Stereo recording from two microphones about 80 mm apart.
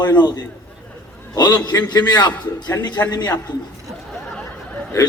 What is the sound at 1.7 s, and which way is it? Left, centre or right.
Speech, left.